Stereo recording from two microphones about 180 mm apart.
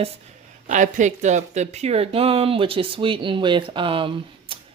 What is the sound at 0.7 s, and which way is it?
Speech, 45° right (ahead or behind).